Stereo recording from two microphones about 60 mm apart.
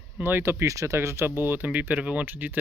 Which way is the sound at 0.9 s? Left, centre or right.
Right.